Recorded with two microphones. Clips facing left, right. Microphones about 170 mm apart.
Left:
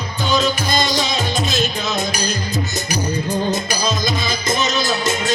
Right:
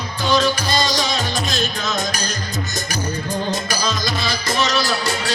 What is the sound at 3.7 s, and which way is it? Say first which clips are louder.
Music: left 2 dB; 15° left (ahead or behind).